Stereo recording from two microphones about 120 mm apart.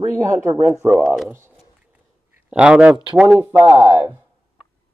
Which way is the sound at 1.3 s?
20° right (ahead or behind).